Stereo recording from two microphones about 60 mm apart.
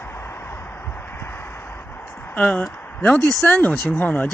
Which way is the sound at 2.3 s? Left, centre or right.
Left.